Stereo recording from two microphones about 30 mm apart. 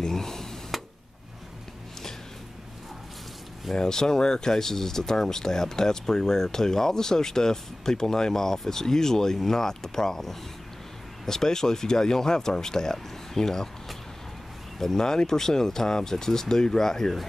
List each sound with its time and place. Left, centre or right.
0.0 s speech: centre
0.7 s a sound: centre
3.7 s speech: centre
14.8 s speech: centre